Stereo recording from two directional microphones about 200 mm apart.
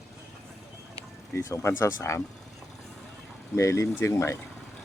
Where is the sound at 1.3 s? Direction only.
15° left (ahead or behind).